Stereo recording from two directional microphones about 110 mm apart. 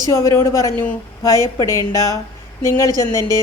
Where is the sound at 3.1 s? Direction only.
35° right (ahead or behind).